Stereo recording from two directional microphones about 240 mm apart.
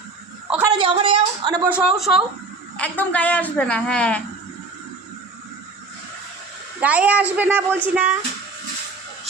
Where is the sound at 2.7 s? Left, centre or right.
Centre.